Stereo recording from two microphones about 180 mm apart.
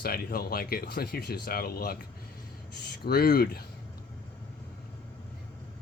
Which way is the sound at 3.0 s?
60° left (ahead or behind).